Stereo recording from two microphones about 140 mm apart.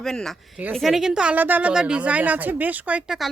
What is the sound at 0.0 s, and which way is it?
A woman's voice, 5° left (ahead or behind).